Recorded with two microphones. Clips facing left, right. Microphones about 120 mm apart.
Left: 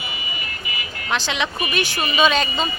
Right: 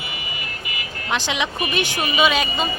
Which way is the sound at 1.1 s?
15° right (ahead or behind).